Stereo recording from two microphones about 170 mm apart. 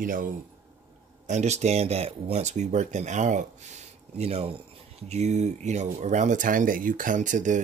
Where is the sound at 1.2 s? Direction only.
40° right (ahead or behind).